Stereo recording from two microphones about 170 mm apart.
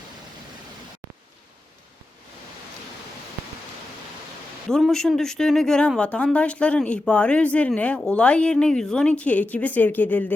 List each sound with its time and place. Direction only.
4.7 s speech: 5° left (ahead or behind)